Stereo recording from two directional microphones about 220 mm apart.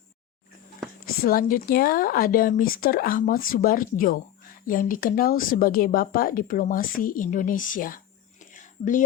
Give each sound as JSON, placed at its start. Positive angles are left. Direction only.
{"t": 1.0, "sound": "speech", "side_deg": 40}